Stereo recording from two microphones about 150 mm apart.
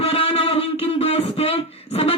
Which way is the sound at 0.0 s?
40° left (ahead or behind).